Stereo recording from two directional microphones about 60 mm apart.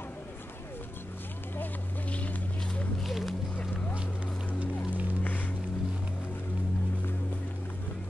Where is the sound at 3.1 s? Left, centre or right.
Centre.